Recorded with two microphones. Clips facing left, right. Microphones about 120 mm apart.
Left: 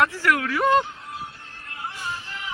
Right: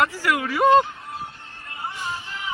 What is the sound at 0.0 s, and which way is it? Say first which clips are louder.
Speech: left 1 dB; 10° right (ahead or behind).